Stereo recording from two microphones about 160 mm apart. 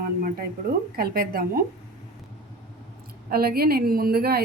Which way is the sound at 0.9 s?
70° right (ahead or behind).